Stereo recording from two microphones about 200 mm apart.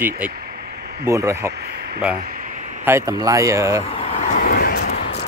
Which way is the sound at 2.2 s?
45° right (ahead or behind).